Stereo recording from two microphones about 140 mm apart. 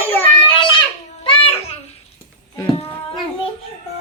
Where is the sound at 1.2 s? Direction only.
40° left (ahead or behind).